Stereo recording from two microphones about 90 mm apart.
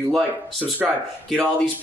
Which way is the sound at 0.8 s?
10° right (ahead or behind).